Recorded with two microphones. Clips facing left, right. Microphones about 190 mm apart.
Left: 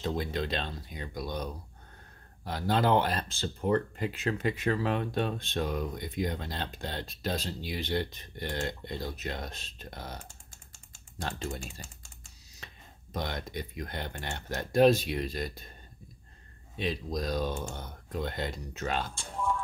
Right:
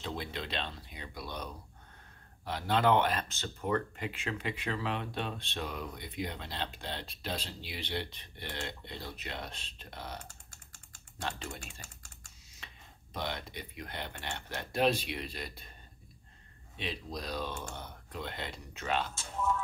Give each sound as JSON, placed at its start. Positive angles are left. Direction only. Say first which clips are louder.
{"t": 0.0, "sound": "speech", "louder": "left 7 dB", "side_deg": 45}
{"t": 11.1, "sound": "speech", "louder": "left 4 dB", "side_deg": 40}
{"t": 13.1, "sound": "speech", "louder": "left 3 dB", "side_deg": 45}
{"t": 16.7, "sound": "speech", "louder": "left 7 dB", "side_deg": 40}
{"t": 19.1, "sound": "speech", "louder": "left 1 dB", "side_deg": -5}